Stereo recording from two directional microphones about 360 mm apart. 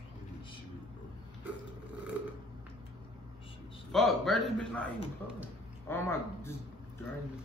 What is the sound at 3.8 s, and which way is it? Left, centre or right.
A man's voice, centre.